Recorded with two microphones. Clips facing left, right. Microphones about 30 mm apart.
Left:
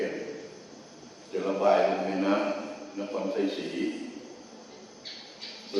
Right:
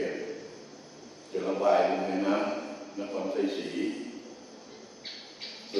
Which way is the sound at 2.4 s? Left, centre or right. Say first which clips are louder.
Left 1 dB; centre.